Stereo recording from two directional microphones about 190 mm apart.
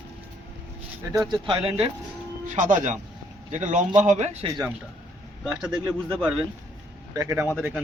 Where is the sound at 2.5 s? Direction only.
40° right (ahead or behind).